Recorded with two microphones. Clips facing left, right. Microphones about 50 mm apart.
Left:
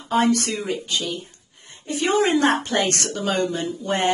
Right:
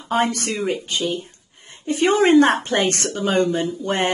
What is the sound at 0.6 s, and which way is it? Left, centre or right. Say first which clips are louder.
Speech: right 3 dB; right.